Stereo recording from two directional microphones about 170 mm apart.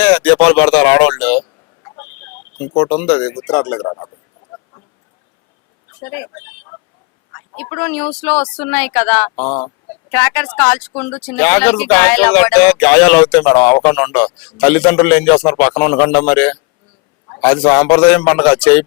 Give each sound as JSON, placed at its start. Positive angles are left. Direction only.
{"t": 0.0, "sound": "speech", "side_deg": 5}
{"t": 2.0, "sound": "a sound", "side_deg": 10}
{"t": 3.4, "sound": "speech", "side_deg": 10}
{"t": 6.0, "sound": "a sound", "side_deg": 15}
{"t": 7.3, "sound": "speech", "side_deg": 10}
{"t": 9.4, "sound": "speech", "side_deg": 35}
{"t": 10.1, "sound": "speech", "side_deg": 10}
{"t": 17.2, "sound": "a sound", "side_deg": 20}
{"t": 17.5, "sound": "speech", "side_deg": 10}